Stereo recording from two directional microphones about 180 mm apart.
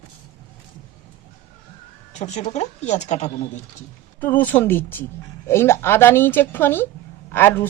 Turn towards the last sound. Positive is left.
turn(degrees=10)  # may be behind; listen again after turning